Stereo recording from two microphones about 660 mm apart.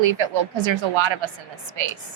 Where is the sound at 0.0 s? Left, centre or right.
Right.